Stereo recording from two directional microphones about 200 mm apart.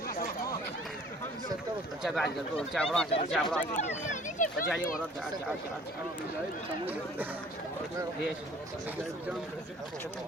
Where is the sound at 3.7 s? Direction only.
35° left (ahead or behind).